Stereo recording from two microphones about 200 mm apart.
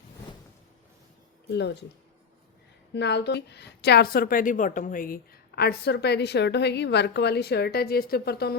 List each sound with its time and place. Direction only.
1.5 s a woman's voice: 60° left (ahead or behind)
2.9 s a woman's voice: 60° left (ahead or behind)